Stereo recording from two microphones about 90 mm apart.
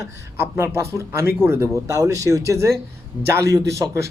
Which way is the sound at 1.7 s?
35° right (ahead or behind).